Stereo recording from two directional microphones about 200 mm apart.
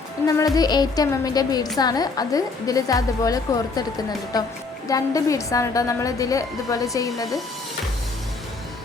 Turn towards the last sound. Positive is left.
turn(degrees=15)  # may be behind; listen again after turning